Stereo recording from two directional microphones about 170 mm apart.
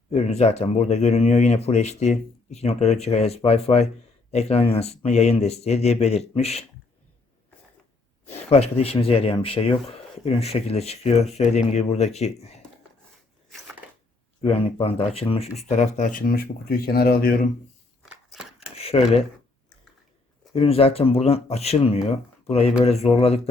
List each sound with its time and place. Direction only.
0.1 s speech: 40° left (ahead or behind)
8.4 s speech: 35° left (ahead or behind)
14.4 s speech: 35° left (ahead or behind); by 17.4 s 60° left (ahead or behind)
18.0 s a sound: 5° right (ahead or behind)
18.8 s speech: 35° left (ahead or behind)
20.6 s speech: 35° left (ahead or behind)